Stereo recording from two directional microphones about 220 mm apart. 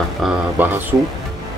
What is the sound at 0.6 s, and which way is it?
Speech, 10° right (ahead or behind).